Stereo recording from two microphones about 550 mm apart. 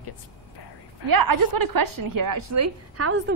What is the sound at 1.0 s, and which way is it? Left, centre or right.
A woman's voice, right.